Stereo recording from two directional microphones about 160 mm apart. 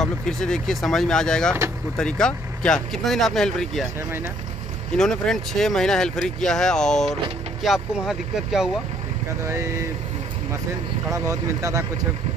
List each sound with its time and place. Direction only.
0.0 s speech: 5° left (ahead or behind)
4.9 s speech: 5° left (ahead or behind)
9.4 s speech: 15° right (ahead or behind)
11.1 s speech: 20° right (ahead or behind)